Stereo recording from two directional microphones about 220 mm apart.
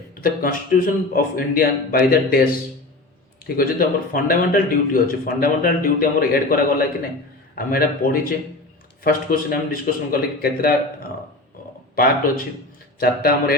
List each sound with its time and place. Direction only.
0.2 s a man's voice: 40° left (ahead or behind)
13.0 s a man's voice: 45° left (ahead or behind)